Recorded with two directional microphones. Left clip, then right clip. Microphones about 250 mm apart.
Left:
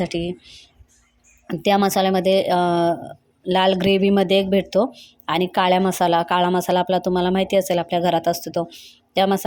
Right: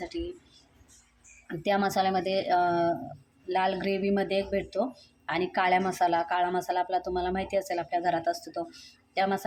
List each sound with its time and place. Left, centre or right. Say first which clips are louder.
0.1 s speech: left 10 dB; left
1.5 s speech: left 9 dB; left